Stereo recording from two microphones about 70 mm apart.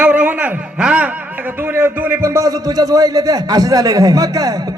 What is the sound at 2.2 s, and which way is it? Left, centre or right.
A man's voice, right.